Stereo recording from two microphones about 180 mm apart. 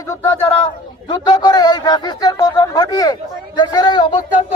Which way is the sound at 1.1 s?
25° left (ahead or behind).